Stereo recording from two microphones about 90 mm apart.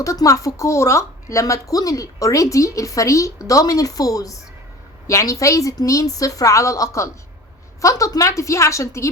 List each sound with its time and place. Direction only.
0.0 s a woman's voice: 35° left (ahead or behind)